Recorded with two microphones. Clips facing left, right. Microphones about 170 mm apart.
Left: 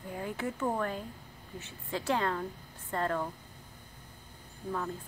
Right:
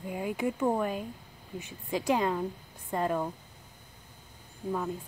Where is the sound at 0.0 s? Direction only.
15° right (ahead or behind).